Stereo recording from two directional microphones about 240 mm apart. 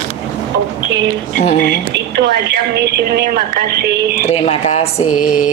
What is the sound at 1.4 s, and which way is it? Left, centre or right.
Mantra, left.